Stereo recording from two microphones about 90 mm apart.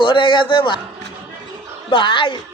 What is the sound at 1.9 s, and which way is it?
Speech, 65° left (ahead or behind).